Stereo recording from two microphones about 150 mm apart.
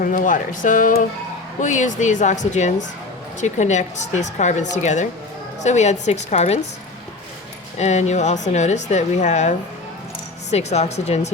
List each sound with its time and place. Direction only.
0.0 s speech: 60° left (ahead or behind); by 6.6 s 45° left (ahead or behind)
7.8 s speech: 50° left (ahead or behind)